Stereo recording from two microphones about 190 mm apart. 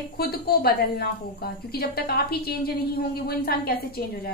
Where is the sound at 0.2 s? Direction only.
55° left (ahead or behind).